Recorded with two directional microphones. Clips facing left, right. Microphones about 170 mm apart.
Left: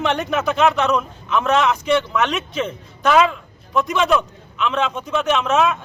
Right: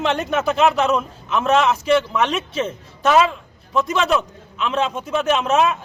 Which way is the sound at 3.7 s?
Centre (ahead or behind).